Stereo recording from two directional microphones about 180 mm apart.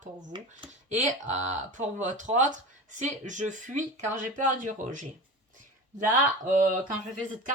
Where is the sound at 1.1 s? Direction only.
40° right (ahead or behind).